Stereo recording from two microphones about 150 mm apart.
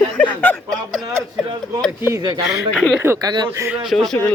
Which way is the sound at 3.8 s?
Centre (ahead or behind).